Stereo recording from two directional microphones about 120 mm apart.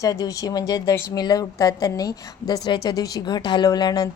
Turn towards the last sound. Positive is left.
turn(degrees=35)  # may be behind; listen again after turning